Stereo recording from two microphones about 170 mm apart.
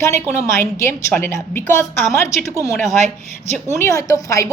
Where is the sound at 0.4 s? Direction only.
15° left (ahead or behind).